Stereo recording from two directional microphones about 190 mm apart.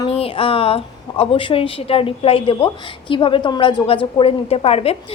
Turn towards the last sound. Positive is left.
turn(degrees=30)  # may be behind; listen again after turning